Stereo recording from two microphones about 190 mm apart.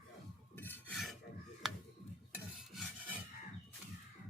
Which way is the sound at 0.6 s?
10° left (ahead or behind).